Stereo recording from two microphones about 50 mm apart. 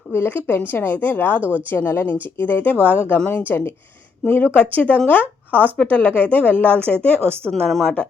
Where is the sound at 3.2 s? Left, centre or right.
Left.